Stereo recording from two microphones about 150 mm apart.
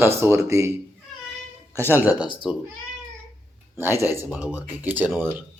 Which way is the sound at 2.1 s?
30° left (ahead or behind).